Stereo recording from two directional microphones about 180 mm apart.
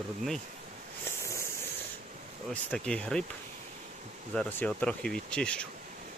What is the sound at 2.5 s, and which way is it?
Speech, 5° left (ahead or behind).